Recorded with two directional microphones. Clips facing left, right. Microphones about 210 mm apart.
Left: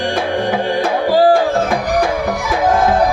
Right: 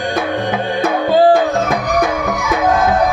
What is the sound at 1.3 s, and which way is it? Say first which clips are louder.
Music: even; 30° left (ahead or behind).